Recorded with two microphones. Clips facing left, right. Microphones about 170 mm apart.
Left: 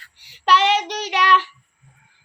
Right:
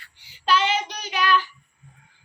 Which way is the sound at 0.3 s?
75° left (ahead or behind).